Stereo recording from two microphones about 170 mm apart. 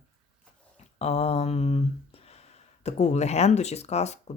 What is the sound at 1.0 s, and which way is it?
Speech, 35° left (ahead or behind).